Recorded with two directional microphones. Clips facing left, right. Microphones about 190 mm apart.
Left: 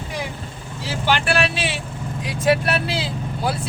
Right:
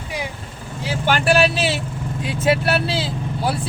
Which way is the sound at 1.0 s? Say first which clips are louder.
Right 3 dB; 45° right (ahead or behind).